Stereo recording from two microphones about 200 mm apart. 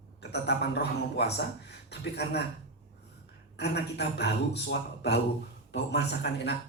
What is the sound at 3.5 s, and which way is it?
A man's voice, 55° left (ahead or behind).